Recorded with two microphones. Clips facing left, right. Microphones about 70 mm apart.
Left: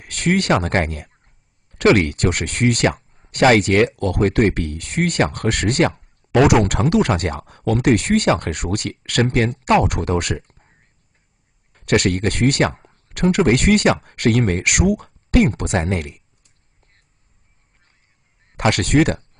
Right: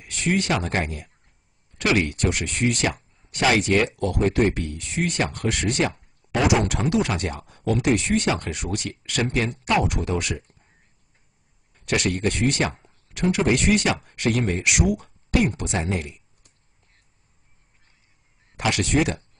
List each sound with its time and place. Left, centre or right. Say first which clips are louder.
0.0 s speech: left 4 dB; left
11.7 s speech: left 6 dB; left
18.6 s speech: left 6 dB; left